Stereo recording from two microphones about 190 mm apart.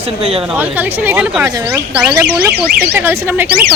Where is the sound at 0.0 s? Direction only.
30° right (ahead or behind).